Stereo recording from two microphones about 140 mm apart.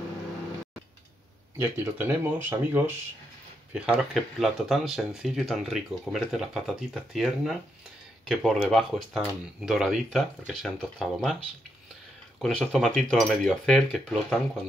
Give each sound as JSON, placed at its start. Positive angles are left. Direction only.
{"t": 1.6, "sound": "speech", "side_deg": -15}
{"t": 12.4, "sound": "speech", "side_deg": 0}